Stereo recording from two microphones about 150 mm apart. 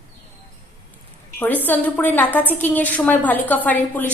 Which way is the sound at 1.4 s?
10° left (ahead or behind).